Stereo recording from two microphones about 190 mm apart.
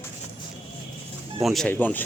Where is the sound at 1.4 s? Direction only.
Centre (ahead or behind).